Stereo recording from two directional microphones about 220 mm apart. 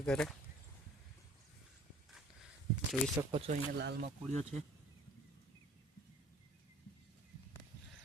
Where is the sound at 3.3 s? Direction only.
25° right (ahead or behind).